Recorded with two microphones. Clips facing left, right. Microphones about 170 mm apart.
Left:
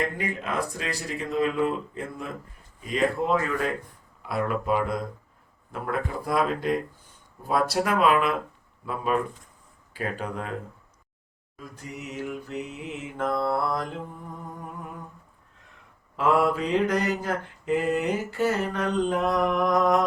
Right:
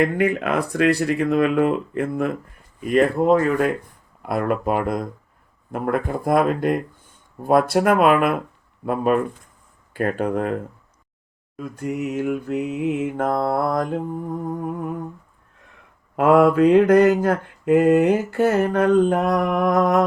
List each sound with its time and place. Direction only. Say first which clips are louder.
0.0 s mantra: right 10 dB; 65° right (ahead or behind)
11.5 s mantra: right 13 dB; 55° right (ahead or behind)
16.1 s mantra: right 8 dB; 55° right (ahead or behind)